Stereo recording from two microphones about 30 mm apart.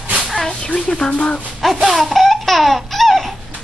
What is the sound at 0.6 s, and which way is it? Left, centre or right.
Speech, left.